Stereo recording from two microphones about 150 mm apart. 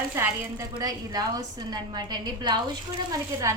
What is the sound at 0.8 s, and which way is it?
A woman's voice, 25° right (ahead or behind).